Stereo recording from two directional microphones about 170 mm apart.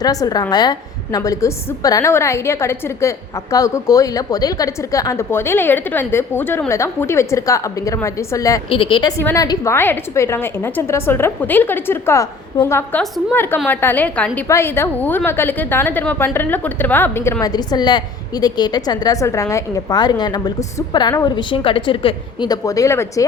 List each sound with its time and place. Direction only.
0.0 s a woman's voice: 20° left (ahead or behind)
8.7 s a woman's voice: 30° left (ahead or behind); by 13.0 s 15° left (ahead or behind)
13.0 s a woman's voice: centre (ahead or behind)
13.3 s a woman's voice: 10° left (ahead or behind)